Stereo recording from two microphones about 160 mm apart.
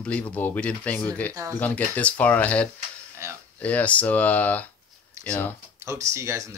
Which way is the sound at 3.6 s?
10° left (ahead or behind).